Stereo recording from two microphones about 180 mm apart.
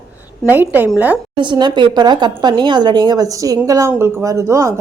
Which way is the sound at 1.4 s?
25° right (ahead or behind).